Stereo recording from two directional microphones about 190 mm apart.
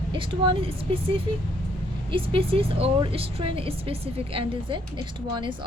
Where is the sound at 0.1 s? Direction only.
25° right (ahead or behind).